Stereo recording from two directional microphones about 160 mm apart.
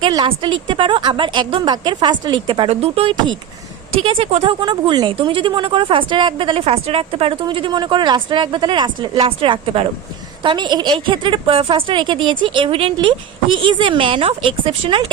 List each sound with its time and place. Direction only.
0.0 s a woman's voice: 30° right (ahead or behind)
4.6 s a woman's voice: 30° right (ahead or behind)